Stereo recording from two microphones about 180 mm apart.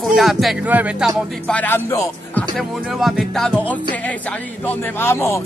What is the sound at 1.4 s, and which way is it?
Speech, 10° left (ahead or behind).